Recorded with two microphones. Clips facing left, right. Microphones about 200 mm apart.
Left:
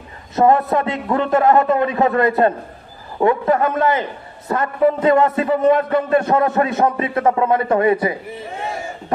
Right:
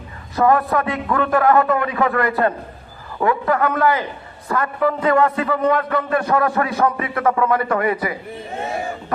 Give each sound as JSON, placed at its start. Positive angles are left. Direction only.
{"t": 0.4, "sound": "a man's voice", "side_deg": 25}